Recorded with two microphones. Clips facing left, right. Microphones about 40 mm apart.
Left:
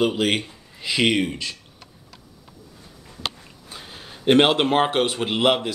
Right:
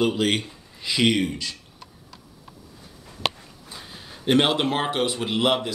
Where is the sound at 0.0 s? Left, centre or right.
Centre.